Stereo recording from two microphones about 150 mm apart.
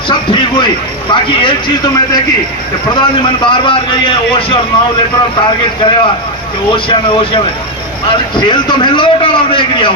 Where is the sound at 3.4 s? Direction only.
35° left (ahead or behind).